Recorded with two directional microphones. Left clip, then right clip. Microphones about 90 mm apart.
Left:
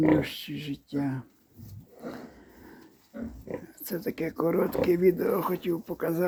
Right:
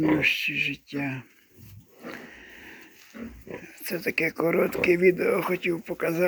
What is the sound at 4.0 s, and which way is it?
Speech, 15° right (ahead or behind).